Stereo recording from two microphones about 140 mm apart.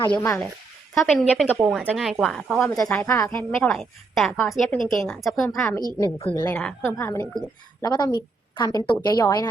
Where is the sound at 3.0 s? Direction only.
20° left (ahead or behind).